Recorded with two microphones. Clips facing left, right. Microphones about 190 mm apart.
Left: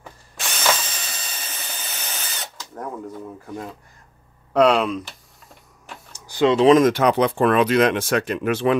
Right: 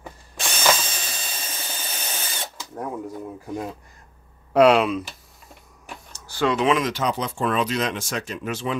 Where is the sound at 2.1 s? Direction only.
25° right (ahead or behind).